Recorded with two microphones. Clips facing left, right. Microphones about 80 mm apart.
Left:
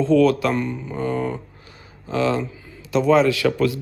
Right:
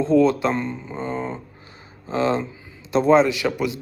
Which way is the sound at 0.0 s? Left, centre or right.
Right.